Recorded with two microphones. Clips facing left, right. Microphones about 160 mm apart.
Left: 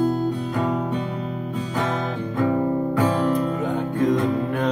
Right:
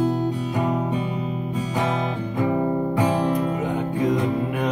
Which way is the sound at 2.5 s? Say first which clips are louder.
Even; 15° right (ahead or behind).